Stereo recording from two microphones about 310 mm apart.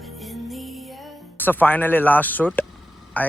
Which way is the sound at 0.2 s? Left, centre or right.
Centre.